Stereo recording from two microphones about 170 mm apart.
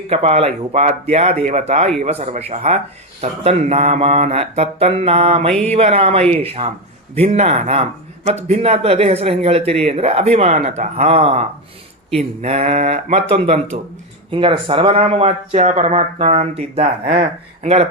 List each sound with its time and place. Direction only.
0.1 s speech: 35° right (ahead or behind)